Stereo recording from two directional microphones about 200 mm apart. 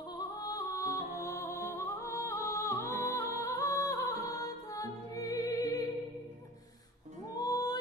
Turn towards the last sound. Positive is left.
turn(degrees=20)  # may be behind; listen again after turning